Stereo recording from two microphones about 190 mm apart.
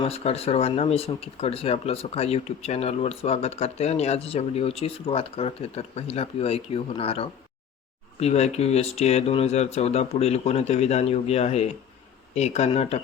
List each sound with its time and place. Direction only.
0.0 s speech: 30° left (ahead or behind)